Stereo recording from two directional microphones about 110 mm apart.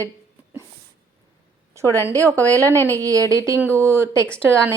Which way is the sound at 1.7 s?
25° right (ahead or behind).